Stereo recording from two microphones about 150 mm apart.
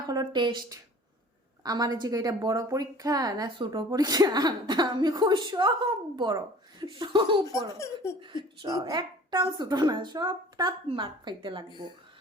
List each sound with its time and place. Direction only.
0.0 s a woman's voice: 25° right (ahead or behind)